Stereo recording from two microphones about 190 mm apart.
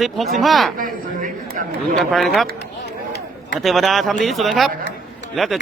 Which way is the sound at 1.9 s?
Centre (ahead or behind).